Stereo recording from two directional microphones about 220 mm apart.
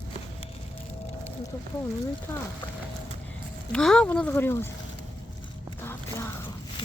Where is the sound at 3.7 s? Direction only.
5° left (ahead or behind).